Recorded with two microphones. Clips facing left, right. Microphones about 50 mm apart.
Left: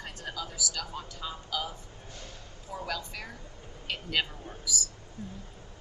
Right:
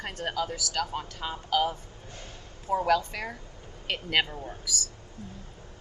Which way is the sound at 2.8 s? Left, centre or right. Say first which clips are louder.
Right 10 dB; right.